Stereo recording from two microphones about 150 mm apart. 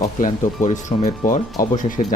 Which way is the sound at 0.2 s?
55° left (ahead or behind).